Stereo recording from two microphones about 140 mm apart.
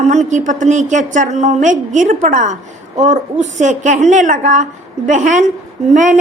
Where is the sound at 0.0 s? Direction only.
55° right (ahead or behind).